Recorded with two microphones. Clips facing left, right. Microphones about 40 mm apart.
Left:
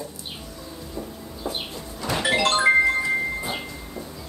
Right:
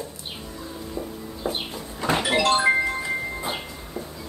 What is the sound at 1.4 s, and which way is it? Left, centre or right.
Bird, right.